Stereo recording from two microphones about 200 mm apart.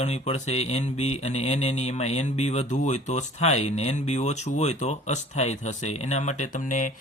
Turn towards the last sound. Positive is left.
turn(degrees=40)  # may be behind; listen again after turning